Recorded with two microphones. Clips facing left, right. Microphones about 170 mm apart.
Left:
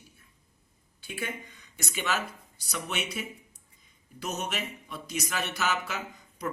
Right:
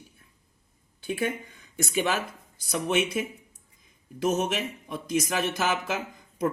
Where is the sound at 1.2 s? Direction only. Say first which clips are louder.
Right 5 dB; 50° right (ahead or behind).